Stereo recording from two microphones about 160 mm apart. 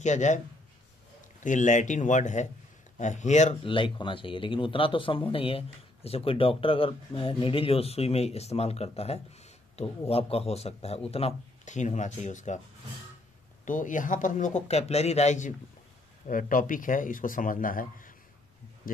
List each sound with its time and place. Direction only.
0.0 s speech: 50° left (ahead or behind)
1.4 s speech: 50° left (ahead or behind)
3.6 s speech: 30° left (ahead or behind); by 12.5 s 50° left (ahead or behind)
13.7 s speech: 55° left (ahead or behind)
16.3 s speech: 60° left (ahead or behind)